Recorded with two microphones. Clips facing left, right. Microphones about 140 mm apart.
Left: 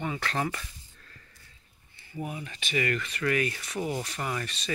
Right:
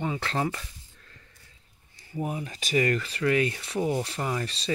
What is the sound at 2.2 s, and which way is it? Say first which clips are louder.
Speech: right 4 dB; 35° right (ahead or behind).